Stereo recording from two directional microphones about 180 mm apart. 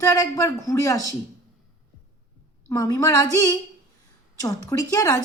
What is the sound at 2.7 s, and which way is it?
A man's voice, 15° left (ahead or behind).